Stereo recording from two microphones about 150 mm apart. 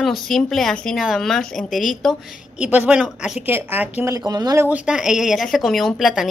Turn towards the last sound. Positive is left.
turn(degrees=0)  # may be behind; listen again after turning